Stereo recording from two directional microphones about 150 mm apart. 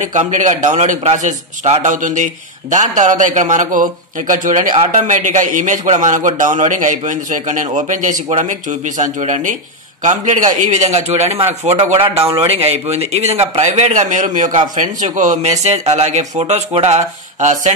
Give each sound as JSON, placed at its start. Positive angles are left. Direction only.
{"t": 0.0, "sound": "a man's voice", "side_deg": -55}